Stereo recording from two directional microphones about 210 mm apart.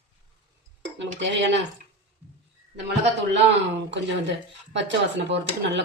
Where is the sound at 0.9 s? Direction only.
60° right (ahead or behind).